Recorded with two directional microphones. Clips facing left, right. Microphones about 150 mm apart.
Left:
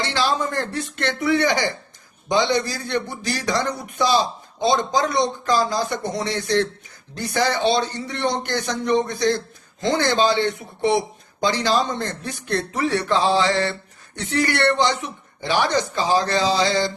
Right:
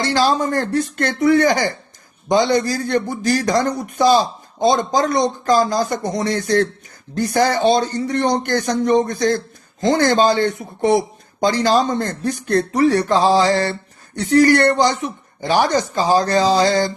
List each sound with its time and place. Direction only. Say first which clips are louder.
0.0 s a man's voice: right 5 dB; 40° right (ahead or behind)